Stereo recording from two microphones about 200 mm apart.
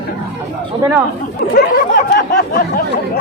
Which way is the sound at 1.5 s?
45° left (ahead or behind).